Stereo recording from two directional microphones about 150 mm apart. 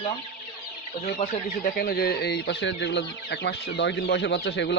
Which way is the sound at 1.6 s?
90° left.